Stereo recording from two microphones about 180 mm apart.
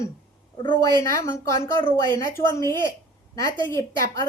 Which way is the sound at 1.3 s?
15° left (ahead or behind).